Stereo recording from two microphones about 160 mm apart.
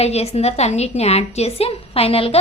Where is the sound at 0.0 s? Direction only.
40° left (ahead or behind).